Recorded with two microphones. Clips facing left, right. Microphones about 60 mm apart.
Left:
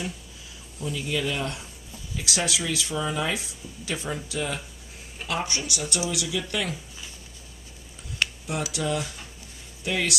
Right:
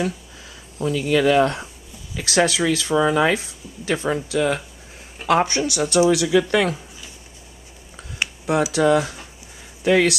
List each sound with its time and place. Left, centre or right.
0.8 s speech: right
8.2 s computer keyboard: centre
8.7 s speech: right